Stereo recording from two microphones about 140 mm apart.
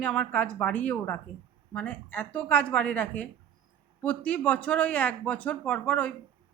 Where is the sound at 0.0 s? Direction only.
10° left (ahead or behind).